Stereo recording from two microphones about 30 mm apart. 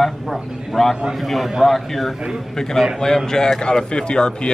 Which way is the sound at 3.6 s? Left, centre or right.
Left.